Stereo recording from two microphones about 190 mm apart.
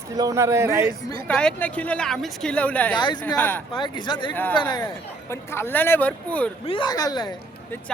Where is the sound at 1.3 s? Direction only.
5° left (ahead or behind).